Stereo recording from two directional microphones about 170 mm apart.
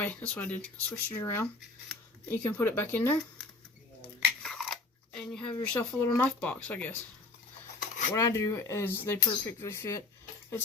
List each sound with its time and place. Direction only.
0.0 s speech: 10° left (ahead or behind)
4.4 s biting: centre (ahead or behind)
5.6 s speech: 10° left (ahead or behind)
8.1 s speech: 15° left (ahead or behind)